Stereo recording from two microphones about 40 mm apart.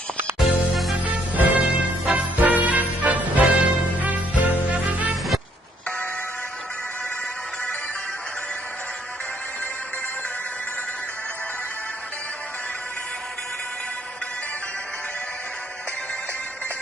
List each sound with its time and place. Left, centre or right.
0.3 s music: centre
1.0 s music: right